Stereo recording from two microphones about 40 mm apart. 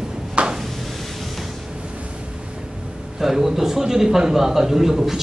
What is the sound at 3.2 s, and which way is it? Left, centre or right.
A man's voice, centre.